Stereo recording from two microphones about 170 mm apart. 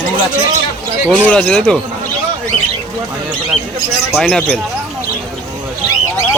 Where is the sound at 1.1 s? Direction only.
5° left (ahead or behind).